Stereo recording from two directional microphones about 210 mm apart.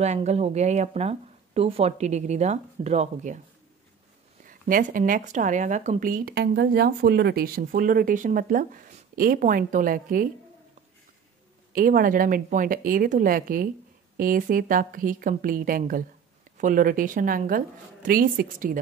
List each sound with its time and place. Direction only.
0.0 s speech: 30° right (ahead or behind)
4.5 s speech: 40° right (ahead or behind)
11.7 s speech: 40° right (ahead or behind)